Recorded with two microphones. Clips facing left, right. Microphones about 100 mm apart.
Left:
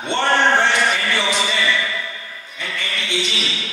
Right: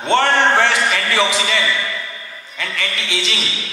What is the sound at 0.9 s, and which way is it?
A man's voice, 90° right.